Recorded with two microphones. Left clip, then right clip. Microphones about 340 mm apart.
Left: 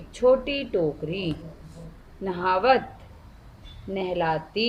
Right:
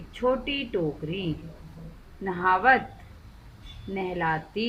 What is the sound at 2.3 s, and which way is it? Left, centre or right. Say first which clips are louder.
Speech: even; centre.